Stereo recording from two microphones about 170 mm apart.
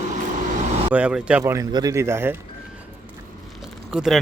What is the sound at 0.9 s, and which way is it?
Speech, 5° right (ahead or behind).